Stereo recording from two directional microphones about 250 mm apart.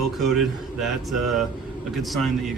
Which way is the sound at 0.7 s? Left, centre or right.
Centre.